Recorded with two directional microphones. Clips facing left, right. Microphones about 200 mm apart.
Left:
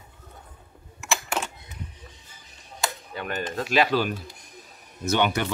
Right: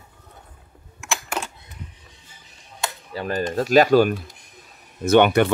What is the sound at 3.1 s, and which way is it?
Speech, 35° right (ahead or behind).